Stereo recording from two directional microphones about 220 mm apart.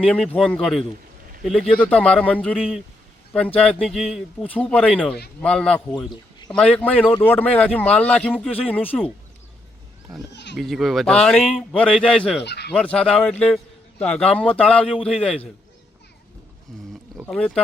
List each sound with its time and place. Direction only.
0.0 s a man's voice: 5° left (ahead or behind)
10.3 s goat: 50° left (ahead or behind)
10.6 s speech: centre (ahead or behind)
12.4 s speech: 50° left (ahead or behind)
12.7 s speech: 5° left (ahead or behind)
16.7 s a sound: centre (ahead or behind)
17.2 s speech: 5° left (ahead or behind)